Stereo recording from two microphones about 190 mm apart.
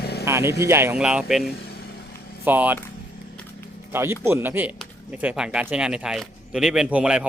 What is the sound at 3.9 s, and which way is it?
Speech, 15° right (ahead or behind).